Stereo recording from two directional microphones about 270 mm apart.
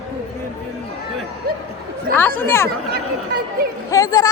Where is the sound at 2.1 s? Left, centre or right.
Centre.